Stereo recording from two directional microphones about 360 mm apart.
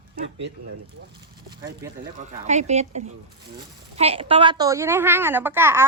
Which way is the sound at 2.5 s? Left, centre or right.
Centre.